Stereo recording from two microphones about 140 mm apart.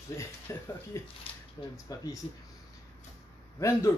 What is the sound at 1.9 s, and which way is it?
Speech, 25° left (ahead or behind).